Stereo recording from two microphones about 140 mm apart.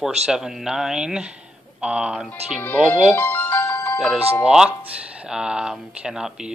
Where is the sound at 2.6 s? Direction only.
15° left (ahead or behind).